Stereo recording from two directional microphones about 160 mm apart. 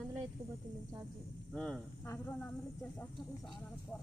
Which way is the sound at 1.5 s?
5° left (ahead or behind).